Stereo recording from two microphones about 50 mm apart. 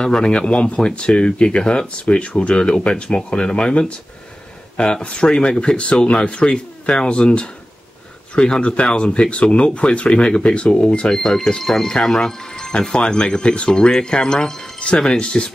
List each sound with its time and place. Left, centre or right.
0.0 s speech: centre
11.1 s speech: centre
14.8 s speech: left